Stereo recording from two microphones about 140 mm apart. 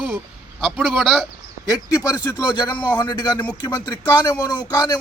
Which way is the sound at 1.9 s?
20° left (ahead or behind).